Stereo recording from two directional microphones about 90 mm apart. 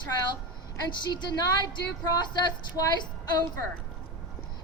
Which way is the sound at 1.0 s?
55° left (ahead or behind).